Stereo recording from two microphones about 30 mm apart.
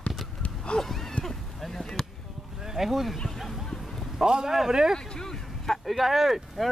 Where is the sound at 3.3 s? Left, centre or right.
Centre.